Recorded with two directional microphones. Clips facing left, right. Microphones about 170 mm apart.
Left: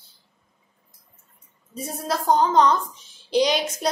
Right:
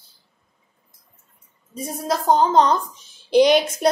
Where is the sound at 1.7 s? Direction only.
15° right (ahead or behind).